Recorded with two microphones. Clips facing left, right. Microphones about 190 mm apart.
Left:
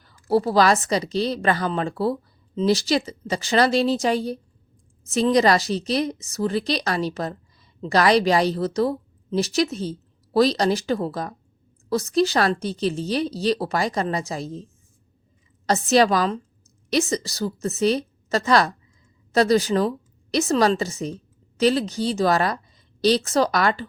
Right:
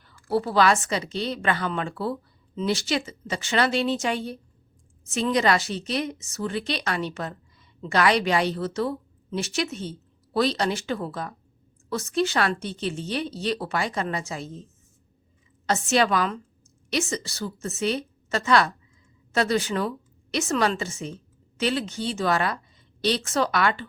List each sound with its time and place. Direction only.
0.3 s a woman's voice: 40° left (ahead or behind)
15.6 s a woman's voice: 35° left (ahead or behind)